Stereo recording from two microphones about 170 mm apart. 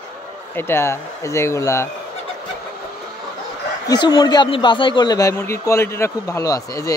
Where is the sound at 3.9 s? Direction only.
25° left (ahead or behind).